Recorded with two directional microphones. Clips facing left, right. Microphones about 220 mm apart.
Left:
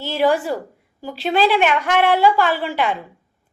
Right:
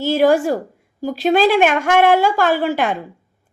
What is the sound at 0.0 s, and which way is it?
A woman's voice, 45° right (ahead or behind).